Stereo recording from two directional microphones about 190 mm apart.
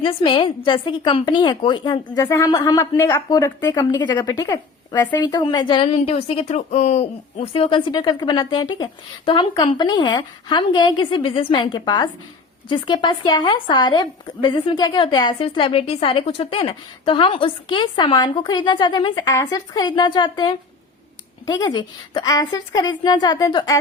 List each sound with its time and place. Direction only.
0.0 s a woman's voice: 25° left (ahead or behind)